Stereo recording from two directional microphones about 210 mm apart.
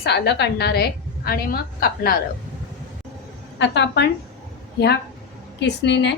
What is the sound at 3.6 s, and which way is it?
Speech, 55° left (ahead or behind).